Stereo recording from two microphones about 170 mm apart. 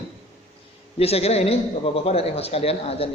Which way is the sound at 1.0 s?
35° left (ahead or behind).